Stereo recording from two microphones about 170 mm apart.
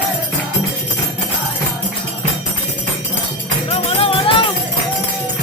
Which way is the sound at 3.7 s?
35° left (ahead or behind).